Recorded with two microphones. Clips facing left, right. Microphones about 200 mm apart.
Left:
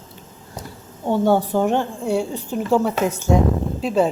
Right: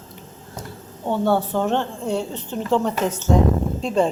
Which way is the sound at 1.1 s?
15° left (ahead or behind).